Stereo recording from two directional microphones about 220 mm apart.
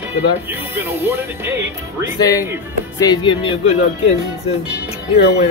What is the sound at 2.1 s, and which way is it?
Speech, 15° left (ahead or behind).